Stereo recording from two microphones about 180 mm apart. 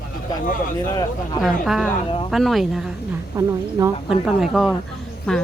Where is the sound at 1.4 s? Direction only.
Centre (ahead or behind).